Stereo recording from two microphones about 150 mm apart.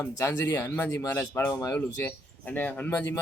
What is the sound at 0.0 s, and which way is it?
A man's voice, 20° left (ahead or behind).